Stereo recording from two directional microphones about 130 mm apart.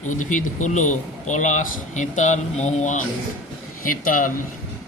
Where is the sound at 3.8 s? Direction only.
90° left.